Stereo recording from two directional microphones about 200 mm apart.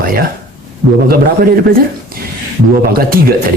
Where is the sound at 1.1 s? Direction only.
50° right (ahead or behind).